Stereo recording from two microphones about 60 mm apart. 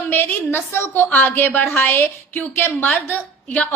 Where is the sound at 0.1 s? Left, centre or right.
Left.